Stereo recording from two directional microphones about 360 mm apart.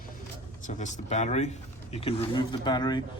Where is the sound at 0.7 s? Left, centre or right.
Centre.